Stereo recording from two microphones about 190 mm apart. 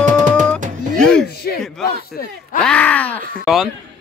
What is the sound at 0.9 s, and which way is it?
Music, 5° left (ahead or behind).